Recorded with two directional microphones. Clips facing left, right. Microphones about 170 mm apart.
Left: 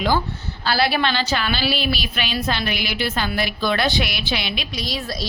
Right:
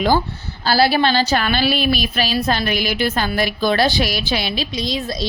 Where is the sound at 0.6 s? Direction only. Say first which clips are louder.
Right 5 dB; 35° right (ahead or behind).